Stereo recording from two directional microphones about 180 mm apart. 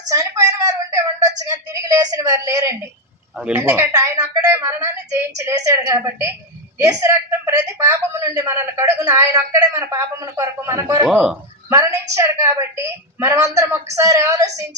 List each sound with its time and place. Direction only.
0.1 s a woman's voice: 20° right (ahead or behind)
11.0 s speech: 5° right (ahead or behind)
11.7 s a woman's voice: 15° right (ahead or behind)